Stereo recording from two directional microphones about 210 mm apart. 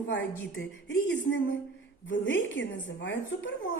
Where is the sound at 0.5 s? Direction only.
60° left (ahead or behind).